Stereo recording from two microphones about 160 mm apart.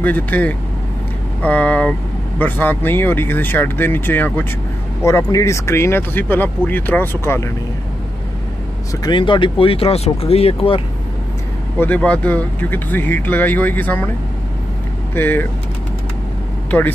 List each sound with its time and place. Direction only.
0.0 s speech: 10° left (ahead or behind)
9.0 s speech: 30° left (ahead or behind)
11.8 s speech: 10° left (ahead or behind)
15.1 s speech: 10° left (ahead or behind)